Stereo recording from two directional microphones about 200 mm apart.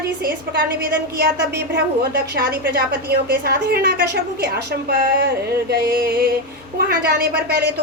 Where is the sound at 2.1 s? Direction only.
50° right (ahead or behind).